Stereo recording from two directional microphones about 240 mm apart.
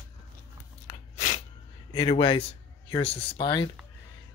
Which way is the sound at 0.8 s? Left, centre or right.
Left.